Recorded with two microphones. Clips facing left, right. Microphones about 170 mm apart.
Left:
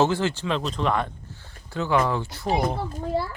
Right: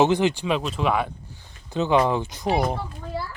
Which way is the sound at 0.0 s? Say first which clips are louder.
Right 3 dB; 15° right (ahead or behind).